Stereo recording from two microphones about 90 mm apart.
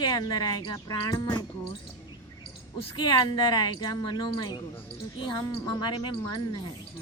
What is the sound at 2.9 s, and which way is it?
Speech, 55° left (ahead or behind).